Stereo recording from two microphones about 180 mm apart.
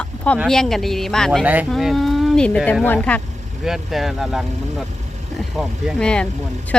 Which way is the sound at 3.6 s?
Centre (ahead or behind).